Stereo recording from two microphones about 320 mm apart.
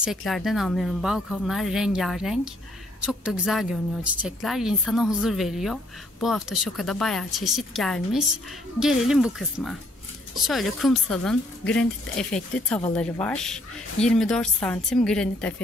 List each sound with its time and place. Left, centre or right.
0.0 s a woman's voice: centre